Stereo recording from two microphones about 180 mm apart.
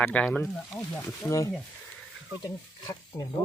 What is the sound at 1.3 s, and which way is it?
Speech, 15° left (ahead or behind).